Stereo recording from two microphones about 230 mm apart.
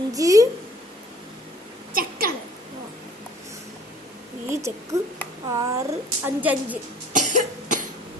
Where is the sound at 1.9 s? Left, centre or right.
Right.